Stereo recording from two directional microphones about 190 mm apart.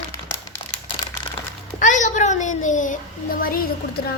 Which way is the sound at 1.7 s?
40° left (ahead or behind).